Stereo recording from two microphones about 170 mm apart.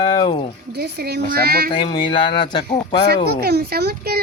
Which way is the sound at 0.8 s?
70° right (ahead or behind).